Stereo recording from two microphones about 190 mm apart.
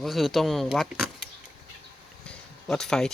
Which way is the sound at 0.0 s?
Centre (ahead or behind).